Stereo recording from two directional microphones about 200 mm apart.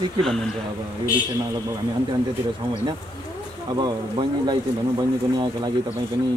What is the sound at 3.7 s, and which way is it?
Speech, 20° right (ahead or behind).